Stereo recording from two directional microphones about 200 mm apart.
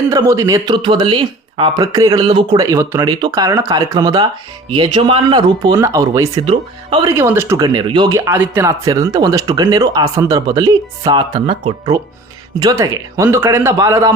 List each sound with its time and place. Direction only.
0.1 s speech: 20° right (ahead or behind)
6.4 s speech: 25° right (ahead or behind)